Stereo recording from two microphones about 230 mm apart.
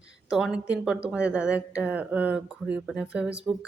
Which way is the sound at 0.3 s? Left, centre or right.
Centre.